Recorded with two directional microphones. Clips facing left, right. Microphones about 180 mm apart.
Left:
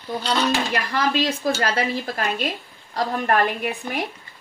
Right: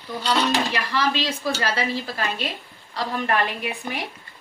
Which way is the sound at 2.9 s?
45° left (ahead or behind).